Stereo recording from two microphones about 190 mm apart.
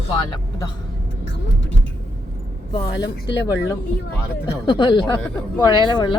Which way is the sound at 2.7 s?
20° left (ahead or behind).